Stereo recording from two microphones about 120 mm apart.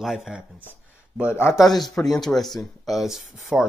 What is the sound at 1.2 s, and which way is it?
Speech, 20° left (ahead or behind).